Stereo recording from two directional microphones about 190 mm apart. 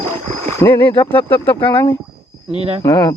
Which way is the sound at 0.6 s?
10° left (ahead or behind).